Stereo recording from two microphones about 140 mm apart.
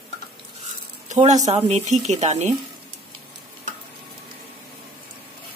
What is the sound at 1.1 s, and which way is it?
Speech, 55° right (ahead or behind).